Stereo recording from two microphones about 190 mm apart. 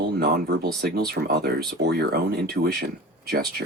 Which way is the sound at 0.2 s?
55° right (ahead or behind).